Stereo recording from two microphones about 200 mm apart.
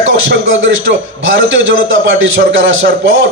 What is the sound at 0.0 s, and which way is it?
A man's voice, 75° right (ahead or behind).